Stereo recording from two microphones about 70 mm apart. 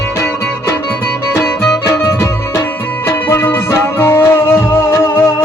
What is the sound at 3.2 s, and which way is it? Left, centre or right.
Music, left.